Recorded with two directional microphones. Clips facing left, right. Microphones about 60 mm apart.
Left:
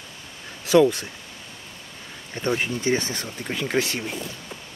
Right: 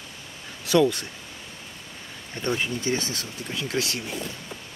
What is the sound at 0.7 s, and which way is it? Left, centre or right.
Speech, centre.